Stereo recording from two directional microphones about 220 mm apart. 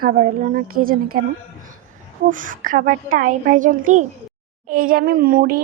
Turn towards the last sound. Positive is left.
turn(degrees=-40)  # may be behind; listen again after turning